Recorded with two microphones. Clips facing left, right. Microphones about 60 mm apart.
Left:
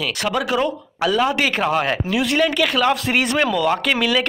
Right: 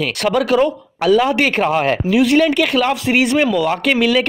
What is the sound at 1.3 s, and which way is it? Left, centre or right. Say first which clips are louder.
Speech: right 3 dB; right.